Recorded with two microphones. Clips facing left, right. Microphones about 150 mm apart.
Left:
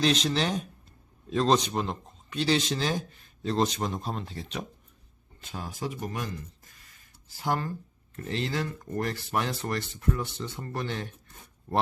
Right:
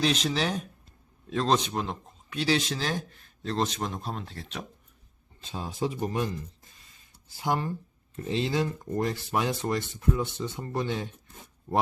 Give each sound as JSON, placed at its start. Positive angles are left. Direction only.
{"t": 0.0, "sound": "speech", "side_deg": -5}
{"t": 5.5, "sound": "speech", "side_deg": -25}
{"t": 7.3, "sound": "speech", "side_deg": -15}